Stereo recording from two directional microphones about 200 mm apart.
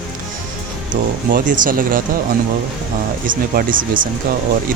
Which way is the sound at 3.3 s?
45° right (ahead or behind).